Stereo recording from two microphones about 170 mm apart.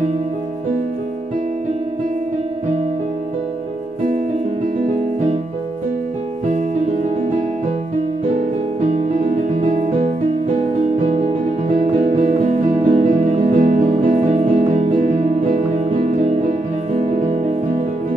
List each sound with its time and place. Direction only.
9.3 s music: 50° right (ahead or behind)
11.7 s music: 50° right (ahead or behind)